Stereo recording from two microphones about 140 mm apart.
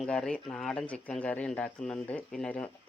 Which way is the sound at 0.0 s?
5° left (ahead or behind).